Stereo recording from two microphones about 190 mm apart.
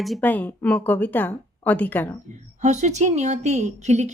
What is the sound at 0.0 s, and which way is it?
A woman's voice, 5° left (ahead or behind).